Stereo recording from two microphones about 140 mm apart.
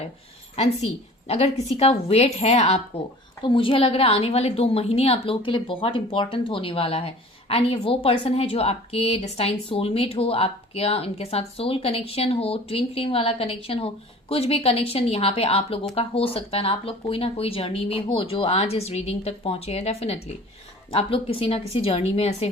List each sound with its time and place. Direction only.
1.3 s a woman's voice: 45° left (ahead or behind)
3.4 s a woman's voice: 40° left (ahead or behind)